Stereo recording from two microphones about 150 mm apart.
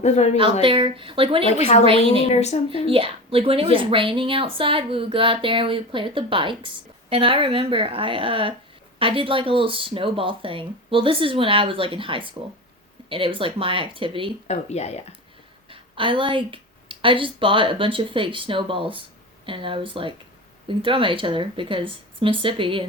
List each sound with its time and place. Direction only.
0.0 s speech: 50° left (ahead or behind)
0.6 s a woman's voice: 35° right (ahead or behind)
1.5 s speech: 45° left (ahead or behind)
2.8 s a woman's voice: 35° right (ahead or behind)
14.4 s speech: 45° left (ahead or behind)
15.7 s a woman's voice: 35° right (ahead or behind)